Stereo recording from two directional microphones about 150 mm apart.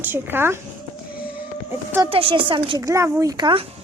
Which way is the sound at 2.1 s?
35° right (ahead or behind).